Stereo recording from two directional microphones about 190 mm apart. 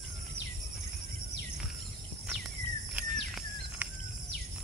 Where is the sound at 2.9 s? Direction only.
5° right (ahead or behind).